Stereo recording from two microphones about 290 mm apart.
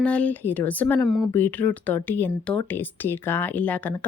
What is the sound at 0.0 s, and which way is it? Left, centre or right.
Speech, centre.